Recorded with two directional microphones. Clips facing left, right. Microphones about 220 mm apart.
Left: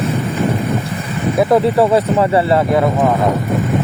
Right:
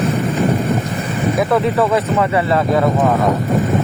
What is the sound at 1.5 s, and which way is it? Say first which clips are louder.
Speech: left 4 dB; 35° left (ahead or behind).